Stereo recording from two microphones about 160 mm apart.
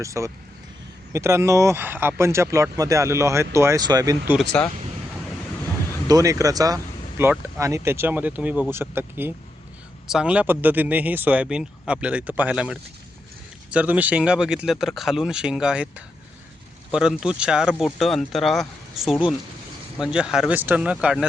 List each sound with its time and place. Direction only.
0.0 s speech: 20° right (ahead or behind)
4.4 s speech: 5° left (ahead or behind)
6.1 s speech: 20° right (ahead or behind); by 21.2 s 5° right (ahead or behind)